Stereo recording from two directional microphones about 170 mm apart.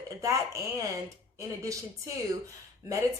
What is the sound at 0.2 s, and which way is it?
A woman's voice, 20° right (ahead or behind).